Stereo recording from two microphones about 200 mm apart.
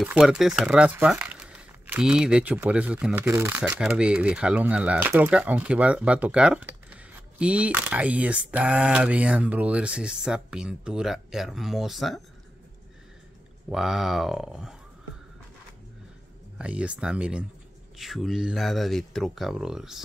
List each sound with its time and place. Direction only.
0.0 s speech: 5° right (ahead or behind)
13.7 s speech: centre (ahead or behind)
16.5 s speech: 5° right (ahead or behind)